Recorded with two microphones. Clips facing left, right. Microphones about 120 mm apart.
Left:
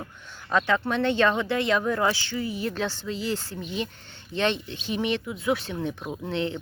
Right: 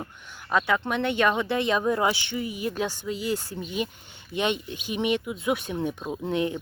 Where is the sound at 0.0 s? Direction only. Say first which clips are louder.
Right 1 dB; 15° right (ahead or behind).